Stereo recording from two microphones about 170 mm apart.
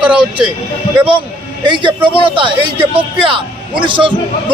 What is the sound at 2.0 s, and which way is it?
A man's voice, 30° right (ahead or behind).